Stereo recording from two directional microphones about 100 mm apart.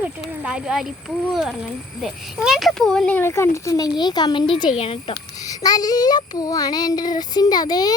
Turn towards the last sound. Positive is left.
turn(degrees=40)  # may be behind; listen again after turning